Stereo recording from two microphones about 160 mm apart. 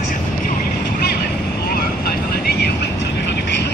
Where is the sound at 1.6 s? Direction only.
75° left (ahead or behind); by 3.7 s 90° left.